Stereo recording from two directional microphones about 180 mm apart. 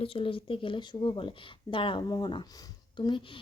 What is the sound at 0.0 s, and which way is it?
Speech, 30° left (ahead or behind).